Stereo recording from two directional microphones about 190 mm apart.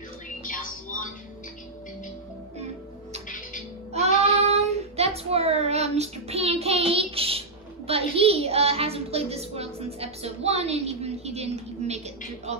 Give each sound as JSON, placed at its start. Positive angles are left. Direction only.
{"t": 0.4, "sound": "music", "side_deg": 45}
{"t": 3.3, "sound": "music", "side_deg": 45}
{"t": 4.5, "sound": "child singing", "side_deg": -35}
{"t": 12.5, "sound": "speech", "side_deg": -35}